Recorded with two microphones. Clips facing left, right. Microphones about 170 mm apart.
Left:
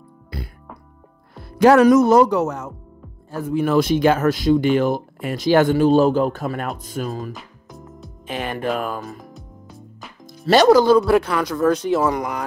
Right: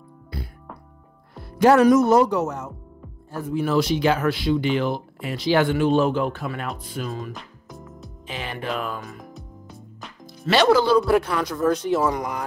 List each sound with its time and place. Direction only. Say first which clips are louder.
1.4 s a man's voice: left 3 dB; 90° left
3.3 s speech: left 4 dB; 60° left (ahead or behind); by 7.3 s 40° left (ahead or behind)
7.3 s music: even; centre (ahead or behind)
8.3 s speech: left 6 dB; 50° left (ahead or behind)
9.2 s music: even; centre (ahead or behind)
10.2 s speech: left 5 dB; 40° left (ahead or behind)
11.0 s a man's voice: left 3 dB; 90° left; by 12.4 s 75° left (ahead or behind)